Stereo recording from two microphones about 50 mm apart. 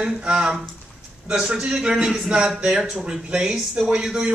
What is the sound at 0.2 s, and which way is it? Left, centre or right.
A man's voice, right.